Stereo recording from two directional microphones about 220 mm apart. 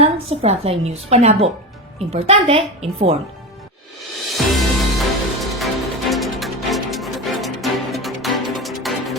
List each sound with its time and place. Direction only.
0.0 s a woman's voice: 25° right (ahead or behind)
4.3 s music: centre (ahead or behind)